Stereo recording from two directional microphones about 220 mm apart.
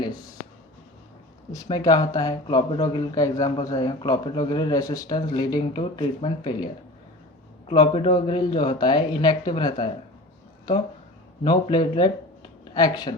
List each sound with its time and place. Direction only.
1.6 s speech: 20° left (ahead or behind)
7.7 s speech: 25° left (ahead or behind)
11.4 s speech: 20° left (ahead or behind)